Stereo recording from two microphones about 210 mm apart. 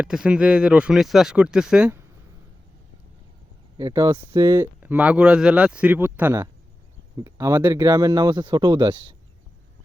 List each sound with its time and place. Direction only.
0.0 s speech: 5° right (ahead or behind)
3.8 s speech: 15° right (ahead or behind)